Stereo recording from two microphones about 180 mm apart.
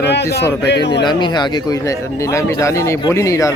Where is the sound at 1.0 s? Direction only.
25° left (ahead or behind).